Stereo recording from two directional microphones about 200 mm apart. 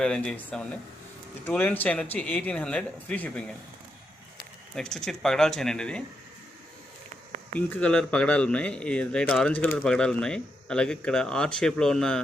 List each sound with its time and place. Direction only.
0.0 s speech: 5° left (ahead or behind)
4.7 s speech: 5° left (ahead or behind)
7.5 s speech: 5° left (ahead or behind)